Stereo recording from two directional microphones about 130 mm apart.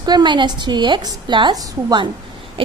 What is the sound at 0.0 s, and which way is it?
A woman's voice, 35° right (ahead or behind).